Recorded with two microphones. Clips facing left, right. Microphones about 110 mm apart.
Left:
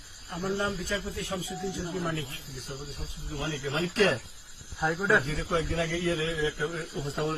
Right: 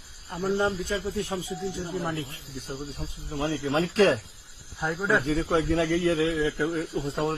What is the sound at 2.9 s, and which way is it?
Speech, 35° right (ahead or behind).